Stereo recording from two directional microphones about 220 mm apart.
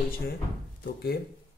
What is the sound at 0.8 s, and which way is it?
Speech, 45° left (ahead or behind).